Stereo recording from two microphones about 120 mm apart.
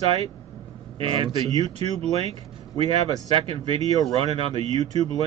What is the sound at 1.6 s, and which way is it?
Speech, 60° right (ahead or behind).